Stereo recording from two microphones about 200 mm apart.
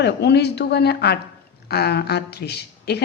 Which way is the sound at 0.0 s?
55° left (ahead or behind).